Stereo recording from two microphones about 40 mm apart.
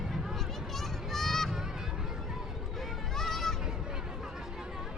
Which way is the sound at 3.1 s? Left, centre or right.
Centre.